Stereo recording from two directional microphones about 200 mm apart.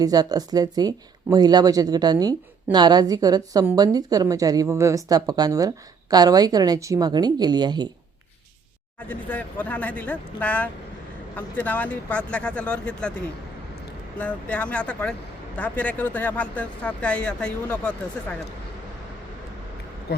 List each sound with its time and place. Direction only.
0.0 s speech: 20° right (ahead or behind)
9.0 s speech: 5° left (ahead or behind)
14.2 s speech: 5° left (ahead or behind)
20.1 s speech: 55° left (ahead or behind)